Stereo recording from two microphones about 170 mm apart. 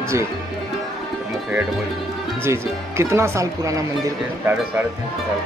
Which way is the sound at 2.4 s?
15° right (ahead or behind).